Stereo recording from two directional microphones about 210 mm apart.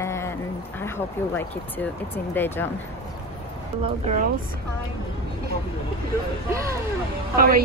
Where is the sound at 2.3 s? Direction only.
10° left (ahead or behind).